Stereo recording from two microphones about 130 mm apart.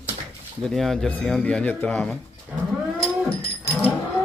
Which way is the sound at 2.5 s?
5° right (ahead or behind).